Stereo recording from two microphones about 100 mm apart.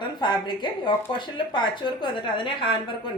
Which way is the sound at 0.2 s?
50° left (ahead or behind).